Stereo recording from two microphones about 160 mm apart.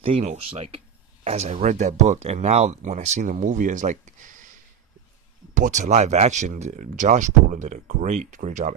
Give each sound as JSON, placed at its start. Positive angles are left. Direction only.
{"t": 0.0, "sound": "speech", "side_deg": -40}
{"t": 5.5, "sound": "speech", "side_deg": -50}